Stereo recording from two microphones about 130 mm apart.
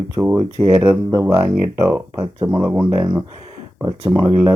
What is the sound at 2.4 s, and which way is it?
Speech, 30° right (ahead or behind).